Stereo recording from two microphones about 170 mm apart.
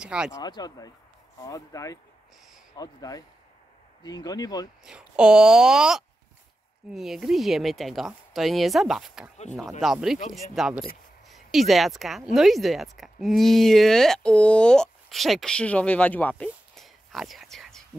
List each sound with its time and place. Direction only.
0.0 s speech: 5° right (ahead or behind)
0.3 s speech: 25° left (ahead or behind)
4.8 s speech: 5° right (ahead or behind)